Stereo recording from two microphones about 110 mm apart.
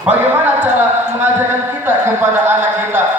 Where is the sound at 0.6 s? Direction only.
15° right (ahead or behind).